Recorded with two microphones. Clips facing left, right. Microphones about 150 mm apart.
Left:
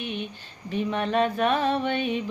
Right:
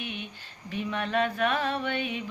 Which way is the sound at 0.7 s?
25° left (ahead or behind).